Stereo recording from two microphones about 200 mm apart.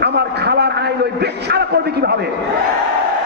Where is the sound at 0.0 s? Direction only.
55° right (ahead or behind).